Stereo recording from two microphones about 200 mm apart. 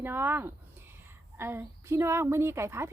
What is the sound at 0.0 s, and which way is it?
Speech, 10° right (ahead or behind).